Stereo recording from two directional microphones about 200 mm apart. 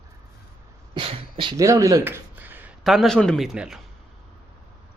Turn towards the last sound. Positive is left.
turn(degrees=0)  # may be behind; listen again after turning